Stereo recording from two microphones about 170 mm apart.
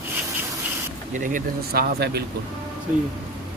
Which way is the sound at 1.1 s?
50° right (ahead or behind).